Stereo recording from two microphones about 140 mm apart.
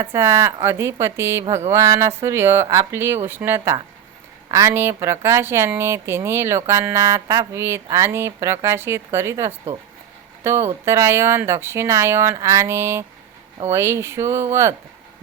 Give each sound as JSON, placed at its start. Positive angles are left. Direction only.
{"t": 0.1, "sound": "speech", "side_deg": -20}